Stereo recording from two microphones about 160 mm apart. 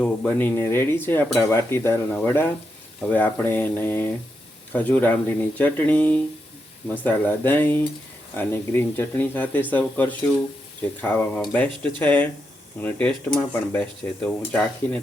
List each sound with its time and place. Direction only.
0.0 s cutlery: 10° left (ahead or behind)